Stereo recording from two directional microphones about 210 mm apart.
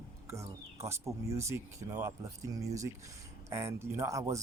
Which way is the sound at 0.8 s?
15° right (ahead or behind).